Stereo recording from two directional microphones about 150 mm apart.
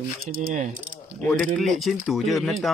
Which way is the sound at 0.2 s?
70° right (ahead or behind).